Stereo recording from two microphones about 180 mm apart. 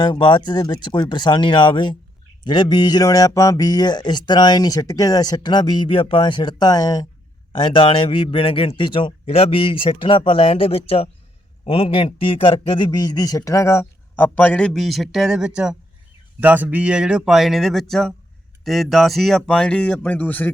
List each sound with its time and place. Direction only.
0.0 s speech: 25° left (ahead or behind); by 20.5 s 10° left (ahead or behind)